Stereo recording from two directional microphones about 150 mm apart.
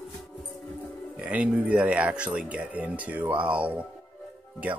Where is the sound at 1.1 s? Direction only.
10° right (ahead or behind).